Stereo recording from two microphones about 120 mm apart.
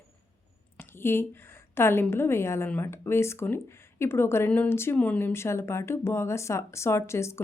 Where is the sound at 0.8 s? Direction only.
20° left (ahead or behind).